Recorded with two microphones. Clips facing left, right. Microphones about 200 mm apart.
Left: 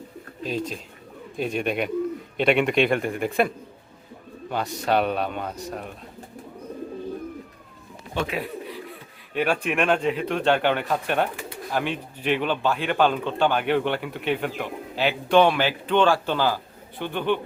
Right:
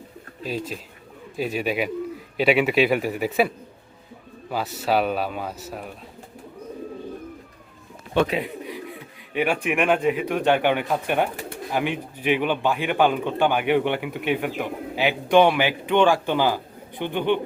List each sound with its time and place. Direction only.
0.4 s a man's voice: 5° right (ahead or behind)
8.4 s pigeon: 15° right (ahead or behind)
9.3 s a man's voice: 10° right (ahead or behind)